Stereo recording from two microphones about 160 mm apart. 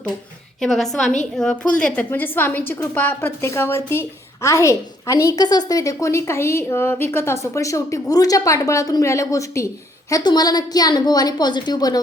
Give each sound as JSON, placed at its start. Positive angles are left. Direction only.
{"t": 0.6, "sound": "a woman's voice", "side_deg": 0}